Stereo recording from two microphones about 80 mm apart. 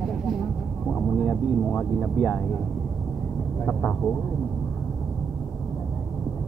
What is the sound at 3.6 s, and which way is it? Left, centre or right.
Speech, centre.